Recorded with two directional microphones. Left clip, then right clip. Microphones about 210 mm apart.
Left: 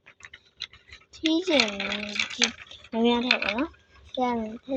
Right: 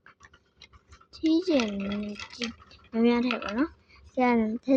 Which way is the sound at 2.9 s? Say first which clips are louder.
Left 1 dB; 20° right (ahead or behind).